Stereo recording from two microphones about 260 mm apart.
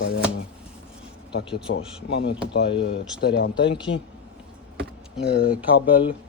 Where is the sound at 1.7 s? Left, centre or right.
Left.